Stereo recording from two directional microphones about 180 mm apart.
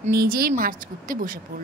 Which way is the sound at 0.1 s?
55° right (ahead or behind).